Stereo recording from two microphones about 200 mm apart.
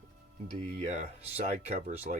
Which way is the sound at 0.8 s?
35° right (ahead or behind).